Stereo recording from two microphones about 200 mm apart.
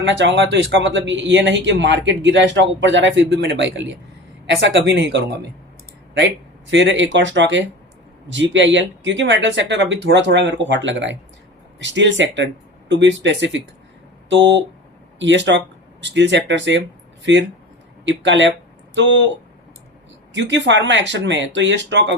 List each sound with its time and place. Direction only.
0.0 s speech: 65° right (ahead or behind)
18.0 s speech: 65° right (ahead or behind)
20.3 s speech: 65° right (ahead or behind)